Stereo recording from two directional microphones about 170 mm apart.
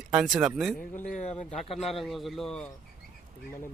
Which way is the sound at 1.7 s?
Centre (ahead or behind).